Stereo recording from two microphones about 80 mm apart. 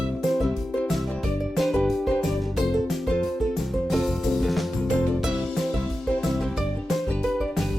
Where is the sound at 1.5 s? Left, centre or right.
Centre.